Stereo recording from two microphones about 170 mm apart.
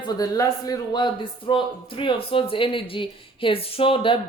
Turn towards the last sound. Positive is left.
turn(degrees=30)  # may be behind; listen again after turning